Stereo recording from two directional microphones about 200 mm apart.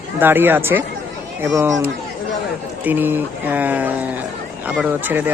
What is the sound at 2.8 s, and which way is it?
Speech, 10° right (ahead or behind).